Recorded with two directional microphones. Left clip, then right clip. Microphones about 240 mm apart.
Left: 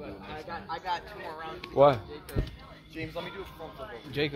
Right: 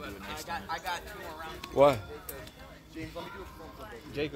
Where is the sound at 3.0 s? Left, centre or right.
Left.